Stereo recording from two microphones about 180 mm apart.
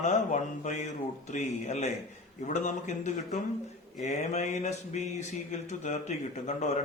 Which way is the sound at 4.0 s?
40° left (ahead or behind).